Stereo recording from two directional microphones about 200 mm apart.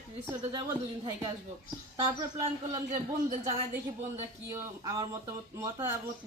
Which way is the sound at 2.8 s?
35° right (ahead or behind).